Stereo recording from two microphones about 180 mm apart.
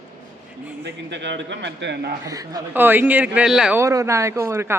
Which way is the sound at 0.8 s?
80° right.